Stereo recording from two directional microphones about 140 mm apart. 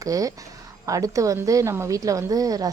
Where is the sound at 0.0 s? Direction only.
25° right (ahead or behind).